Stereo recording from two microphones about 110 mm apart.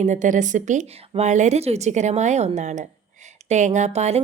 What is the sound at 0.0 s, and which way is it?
A woman's voice, 90° right.